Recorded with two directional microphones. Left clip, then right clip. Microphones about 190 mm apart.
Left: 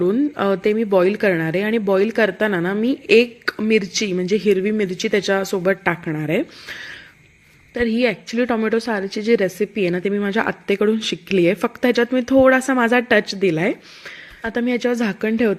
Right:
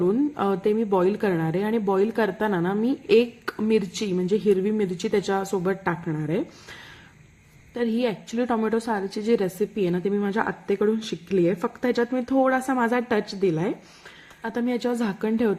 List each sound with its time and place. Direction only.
0.0 s speech: 10° left (ahead or behind)